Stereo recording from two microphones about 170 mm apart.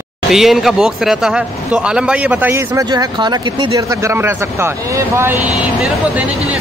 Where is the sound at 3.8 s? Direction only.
15° right (ahead or behind).